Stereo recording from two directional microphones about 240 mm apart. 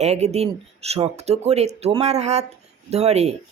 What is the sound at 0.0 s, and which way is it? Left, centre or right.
Speech, right.